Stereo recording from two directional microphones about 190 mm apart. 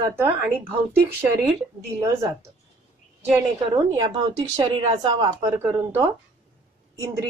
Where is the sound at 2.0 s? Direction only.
15° right (ahead or behind).